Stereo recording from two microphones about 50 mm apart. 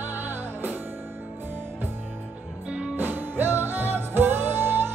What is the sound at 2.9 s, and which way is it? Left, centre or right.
Music, right.